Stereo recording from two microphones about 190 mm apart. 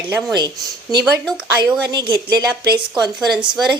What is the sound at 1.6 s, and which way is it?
Speech, 20° right (ahead or behind).